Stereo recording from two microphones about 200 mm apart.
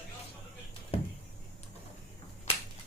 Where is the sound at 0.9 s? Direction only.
30° left (ahead or behind).